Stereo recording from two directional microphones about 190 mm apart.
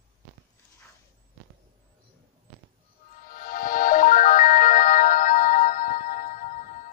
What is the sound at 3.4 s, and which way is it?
Music, 50° left (ahead or behind).